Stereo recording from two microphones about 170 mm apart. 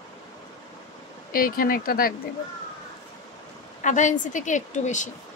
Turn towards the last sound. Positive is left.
turn(degrees=45)  # may be behind; listen again after turning